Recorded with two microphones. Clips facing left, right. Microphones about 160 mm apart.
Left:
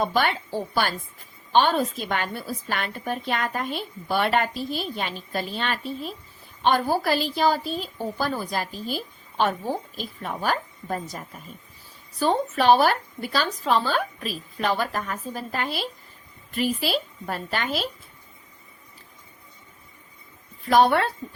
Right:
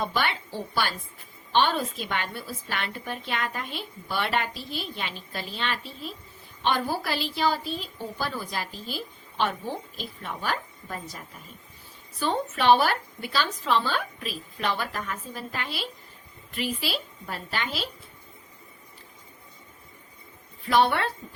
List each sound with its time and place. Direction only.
0.0 s a woman's voice: 45° left (ahead or behind)
10.0 s a woman's voice: 40° left (ahead or behind)
20.7 s a woman's voice: 45° left (ahead or behind)